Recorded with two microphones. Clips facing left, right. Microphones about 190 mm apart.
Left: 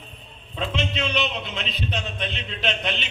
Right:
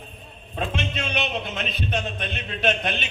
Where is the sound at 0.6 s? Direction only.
50° right (ahead or behind).